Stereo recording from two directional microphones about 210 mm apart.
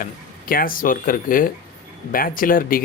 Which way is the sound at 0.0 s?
45° left (ahead or behind).